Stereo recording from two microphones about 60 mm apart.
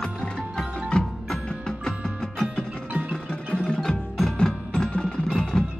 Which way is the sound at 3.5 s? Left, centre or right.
Centre.